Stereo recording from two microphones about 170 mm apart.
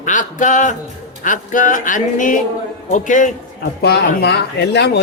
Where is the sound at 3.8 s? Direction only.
75° left (ahead or behind).